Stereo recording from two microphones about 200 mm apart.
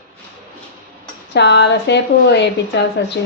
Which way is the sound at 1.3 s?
60° left (ahead or behind).